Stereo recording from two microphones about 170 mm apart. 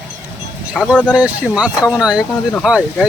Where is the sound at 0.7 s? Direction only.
5° right (ahead or behind).